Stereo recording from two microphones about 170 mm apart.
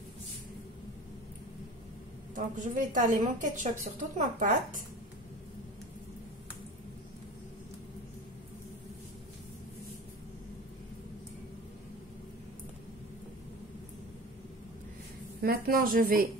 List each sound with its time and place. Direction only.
2.3 s a woman's voice: 50° right (ahead or behind)
15.4 s speech: 60° right (ahead or behind)